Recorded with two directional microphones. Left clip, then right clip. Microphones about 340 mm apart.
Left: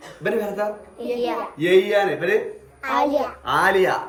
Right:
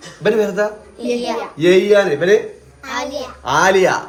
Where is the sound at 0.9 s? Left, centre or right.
Centre.